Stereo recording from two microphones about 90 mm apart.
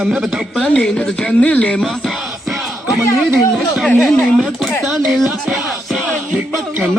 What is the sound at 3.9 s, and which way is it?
Speech, 15° left (ahead or behind).